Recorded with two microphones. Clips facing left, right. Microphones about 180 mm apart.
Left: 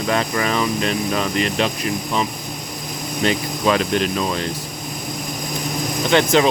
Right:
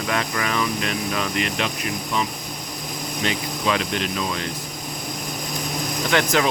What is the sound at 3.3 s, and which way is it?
Speech, 40° left (ahead or behind).